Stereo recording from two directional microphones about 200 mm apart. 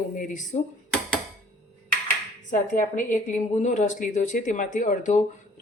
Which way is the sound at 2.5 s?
40° left (ahead or behind).